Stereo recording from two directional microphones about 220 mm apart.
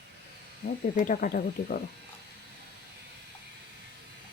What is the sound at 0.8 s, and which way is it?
Speech, 40° left (ahead or behind).